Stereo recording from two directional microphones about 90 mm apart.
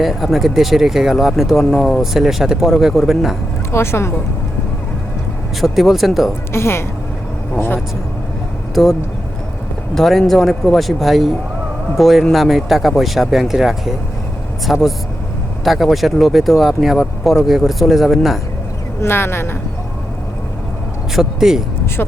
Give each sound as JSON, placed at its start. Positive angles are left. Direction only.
{"t": 0.0, "sound": "speech", "side_deg": 0}
{"t": 3.7, "sound": "a woman's voice", "side_deg": 30}
{"t": 5.5, "sound": "speech", "side_deg": 0}
{"t": 6.5, "sound": "a woman's voice", "side_deg": 30}
{"t": 8.7, "sound": "speech", "side_deg": 0}
{"t": 19.0, "sound": "a woman's voice", "side_deg": 25}
{"t": 21.1, "sound": "speech", "side_deg": -5}